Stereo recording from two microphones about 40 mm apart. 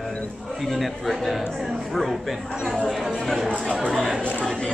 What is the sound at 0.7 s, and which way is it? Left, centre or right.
Speech, centre.